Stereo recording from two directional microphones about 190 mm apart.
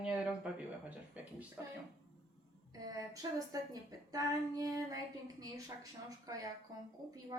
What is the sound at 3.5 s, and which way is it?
Speech, 20° right (ahead or behind).